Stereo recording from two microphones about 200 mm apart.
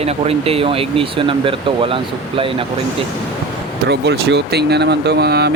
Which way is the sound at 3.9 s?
55° right (ahead or behind).